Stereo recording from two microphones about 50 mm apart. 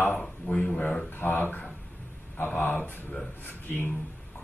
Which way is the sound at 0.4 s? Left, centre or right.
Left.